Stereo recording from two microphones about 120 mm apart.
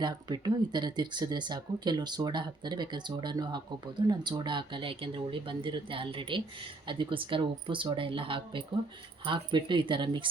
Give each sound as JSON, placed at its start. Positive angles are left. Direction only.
{"t": 0.0, "sound": "speech", "side_deg": -35}